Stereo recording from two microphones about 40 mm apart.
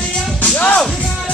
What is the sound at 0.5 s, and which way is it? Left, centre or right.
Music, left.